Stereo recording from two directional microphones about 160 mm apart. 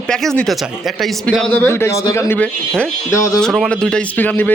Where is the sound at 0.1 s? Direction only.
5° left (ahead or behind).